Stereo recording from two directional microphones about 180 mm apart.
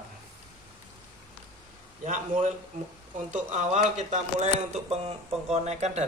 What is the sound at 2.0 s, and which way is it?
A man's voice, 45° right (ahead or behind).